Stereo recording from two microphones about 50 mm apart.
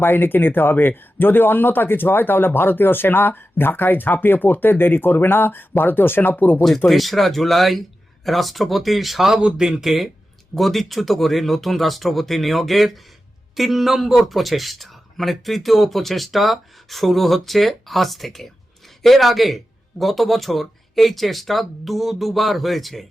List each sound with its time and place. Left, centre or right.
0.0 s speech: left
6.6 s speech: centre
9.4 s speech: centre
9.8 s speech: centre